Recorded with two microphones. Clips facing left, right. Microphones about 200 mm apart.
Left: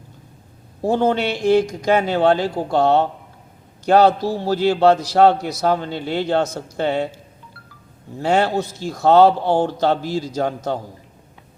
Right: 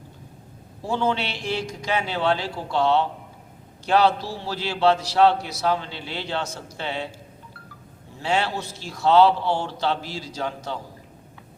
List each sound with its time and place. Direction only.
0.8 s a man's voice: 45° left (ahead or behind)
8.2 s a man's voice: 45° left (ahead or behind)